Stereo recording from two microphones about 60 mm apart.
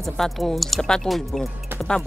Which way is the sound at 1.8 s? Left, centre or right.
Centre.